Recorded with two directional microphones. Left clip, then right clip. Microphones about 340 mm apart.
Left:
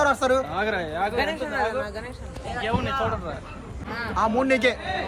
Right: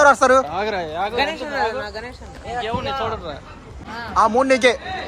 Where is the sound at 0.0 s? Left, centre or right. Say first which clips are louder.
Right 8 dB; right.